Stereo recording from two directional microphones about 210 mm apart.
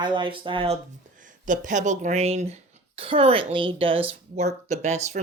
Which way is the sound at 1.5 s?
35° right (ahead or behind).